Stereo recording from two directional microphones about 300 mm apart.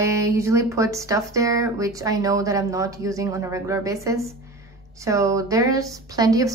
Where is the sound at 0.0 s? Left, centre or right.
Centre.